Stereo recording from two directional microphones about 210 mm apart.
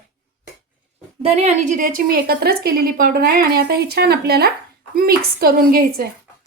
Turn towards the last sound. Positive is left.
turn(degrees=-45)  # may be behind; listen again after turning